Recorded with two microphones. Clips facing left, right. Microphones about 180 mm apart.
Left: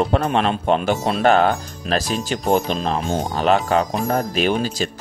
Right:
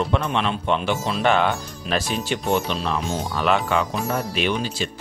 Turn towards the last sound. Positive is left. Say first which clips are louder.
# left 4 dB
turn(degrees=40)  # may be behind; listen again after turning